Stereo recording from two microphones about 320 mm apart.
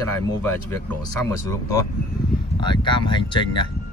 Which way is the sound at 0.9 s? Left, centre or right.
Centre.